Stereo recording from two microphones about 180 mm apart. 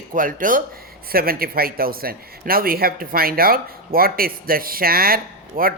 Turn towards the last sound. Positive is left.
turn(degrees=-50)  # may be behind; listen again after turning